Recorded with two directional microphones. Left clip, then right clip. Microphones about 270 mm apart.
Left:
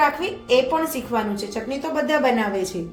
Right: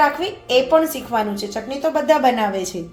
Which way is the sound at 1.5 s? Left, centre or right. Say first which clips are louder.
Right 5 dB; right.